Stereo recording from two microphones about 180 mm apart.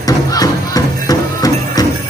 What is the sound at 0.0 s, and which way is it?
Music, 20° left (ahead or behind).